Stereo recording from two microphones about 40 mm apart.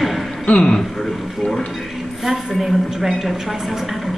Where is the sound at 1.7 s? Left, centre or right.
Centre.